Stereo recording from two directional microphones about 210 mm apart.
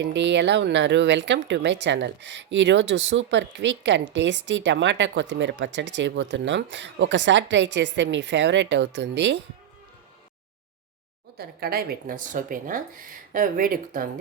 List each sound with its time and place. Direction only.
0.0 s speech: 55° right (ahead or behind)
11.3 s speech: 45° right (ahead or behind)